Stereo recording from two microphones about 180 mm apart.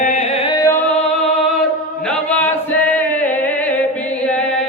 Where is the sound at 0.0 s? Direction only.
45° left (ahead or behind).